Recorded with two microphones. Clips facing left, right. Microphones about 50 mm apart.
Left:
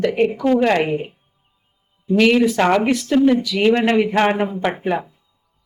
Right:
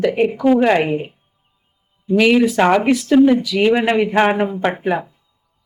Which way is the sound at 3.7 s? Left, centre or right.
Centre.